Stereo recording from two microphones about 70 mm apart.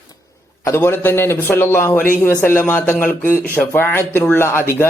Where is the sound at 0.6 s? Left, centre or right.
Left.